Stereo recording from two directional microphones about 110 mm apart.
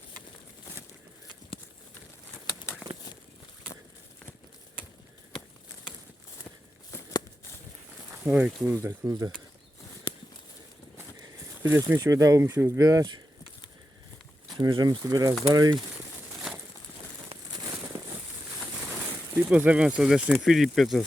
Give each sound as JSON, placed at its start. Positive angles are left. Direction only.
{"t": 6.9, "sound": "a sound", "side_deg": 25}
{"t": 8.1, "sound": "a sound", "side_deg": -15}
{"t": 8.6, "sound": "speech", "side_deg": -20}
{"t": 9.0, "sound": "speech", "side_deg": -30}
{"t": 11.7, "sound": "speech", "side_deg": -25}
{"t": 12.8, "sound": "speech", "side_deg": -35}
{"t": 14.6, "sound": "speech", "side_deg": -40}
{"t": 19.5, "sound": "speech", "side_deg": -10}